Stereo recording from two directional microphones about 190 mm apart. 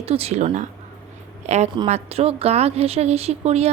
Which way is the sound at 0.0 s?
30° right (ahead or behind).